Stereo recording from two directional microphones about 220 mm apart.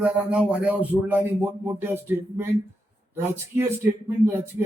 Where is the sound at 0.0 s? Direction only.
5° right (ahead or behind).